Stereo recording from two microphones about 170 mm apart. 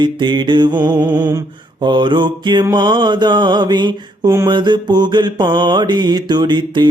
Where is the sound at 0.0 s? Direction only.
25° right (ahead or behind).